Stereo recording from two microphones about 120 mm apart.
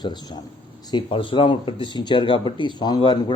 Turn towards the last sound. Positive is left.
turn(degrees=40)  # may be behind; listen again after turning